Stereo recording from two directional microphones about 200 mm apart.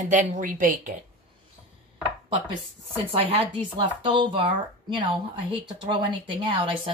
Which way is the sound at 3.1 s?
30° right (ahead or behind).